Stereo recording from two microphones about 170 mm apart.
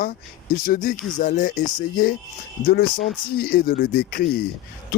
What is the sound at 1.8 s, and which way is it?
Speech, 60° left (ahead or behind).